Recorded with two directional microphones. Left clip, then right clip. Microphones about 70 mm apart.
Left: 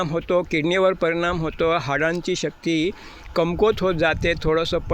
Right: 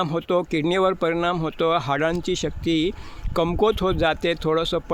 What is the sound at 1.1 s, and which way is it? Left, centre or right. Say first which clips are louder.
Speech: even; right.